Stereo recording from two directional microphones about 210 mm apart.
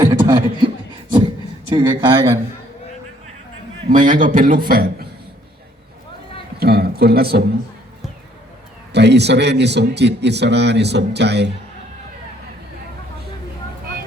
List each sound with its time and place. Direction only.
0.0 s chuckle: 15° right (ahead or behind)
1.7 s a man's voice: 20° right (ahead or behind)
3.8 s a man's voice: 40° right (ahead or behind)
6.6 s a man's voice: 50° right (ahead or behind)
8.9 s a man's voice: 55° right (ahead or behind)